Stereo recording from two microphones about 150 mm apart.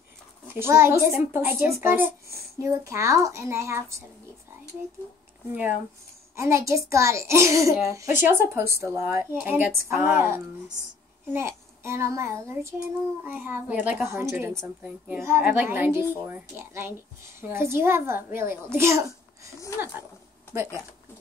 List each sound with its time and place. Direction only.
0.6 s a woman's voice: 15° right (ahead or behind)
5.5 s a woman's voice: 10° right (ahead or behind)